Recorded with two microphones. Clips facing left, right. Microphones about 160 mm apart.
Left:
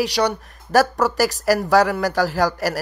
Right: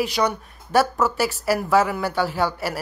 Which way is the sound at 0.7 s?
40° left (ahead or behind).